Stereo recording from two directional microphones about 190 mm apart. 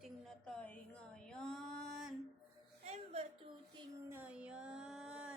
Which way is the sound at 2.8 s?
35° right (ahead or behind).